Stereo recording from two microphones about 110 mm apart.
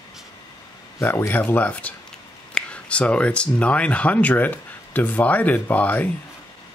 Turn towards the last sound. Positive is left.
turn(degrees=15)  # may be behind; listen again after turning